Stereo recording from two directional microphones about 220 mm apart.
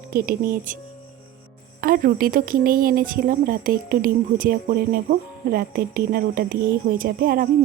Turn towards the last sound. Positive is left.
turn(degrees=-40)  # may be behind; listen again after turning